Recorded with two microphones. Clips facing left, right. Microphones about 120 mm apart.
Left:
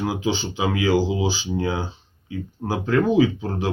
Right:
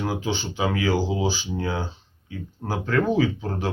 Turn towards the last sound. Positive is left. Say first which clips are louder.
# left 3 dB
turn(degrees=15)  # may be behind; listen again after turning